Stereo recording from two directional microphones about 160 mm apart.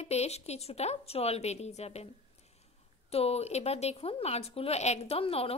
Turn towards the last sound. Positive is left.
turn(degrees=40)  # may be behind; listen again after turning